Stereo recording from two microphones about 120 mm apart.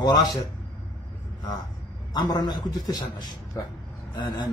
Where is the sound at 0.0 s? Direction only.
35° left (ahead or behind).